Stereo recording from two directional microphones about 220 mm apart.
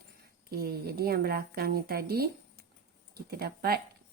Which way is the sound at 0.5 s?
45° right (ahead or behind).